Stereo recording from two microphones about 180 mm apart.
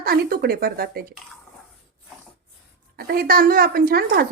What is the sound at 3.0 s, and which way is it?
A woman's voice, 55° right (ahead or behind).